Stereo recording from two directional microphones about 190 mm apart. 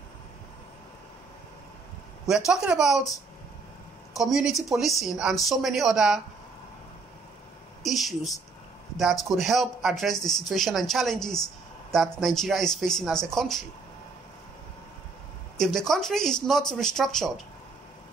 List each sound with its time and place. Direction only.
2.2 s speech: centre (ahead or behind)
4.2 s speech: centre (ahead or behind)
7.8 s speech: centre (ahead or behind)
15.5 s speech: centre (ahead or behind)